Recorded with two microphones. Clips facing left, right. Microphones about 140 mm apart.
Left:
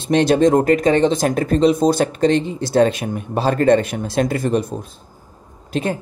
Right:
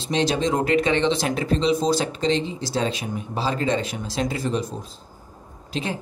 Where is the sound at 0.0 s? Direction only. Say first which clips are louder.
Left 8 dB; 55° left (ahead or behind).